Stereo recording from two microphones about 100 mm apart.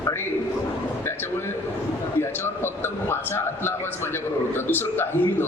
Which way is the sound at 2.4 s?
25° left (ahead or behind).